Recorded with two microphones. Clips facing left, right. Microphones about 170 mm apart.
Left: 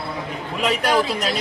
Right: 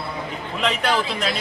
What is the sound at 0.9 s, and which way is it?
Speech, 40° left (ahead or behind).